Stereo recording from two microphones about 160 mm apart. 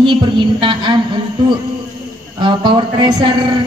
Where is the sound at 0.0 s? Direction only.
30° right (ahead or behind).